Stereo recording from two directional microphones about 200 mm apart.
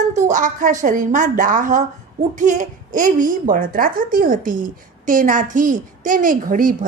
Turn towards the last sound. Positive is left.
turn(degrees=-40)  # may be behind; listen again after turning